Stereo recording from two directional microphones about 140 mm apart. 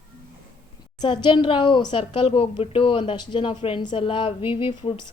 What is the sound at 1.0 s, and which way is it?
A woman's voice, 35° left (ahead or behind).